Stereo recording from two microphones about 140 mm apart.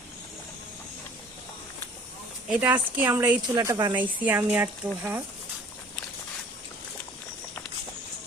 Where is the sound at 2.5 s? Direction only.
10° right (ahead or behind); by 4.0 s 30° right (ahead or behind).